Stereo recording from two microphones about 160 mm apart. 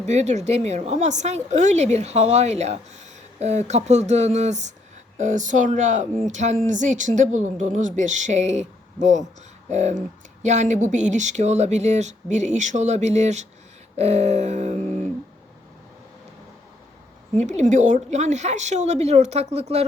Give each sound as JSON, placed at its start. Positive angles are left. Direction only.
{"t": 0.0, "sound": "speech", "side_deg": -45}
{"t": 17.6, "sound": "speech", "side_deg": -50}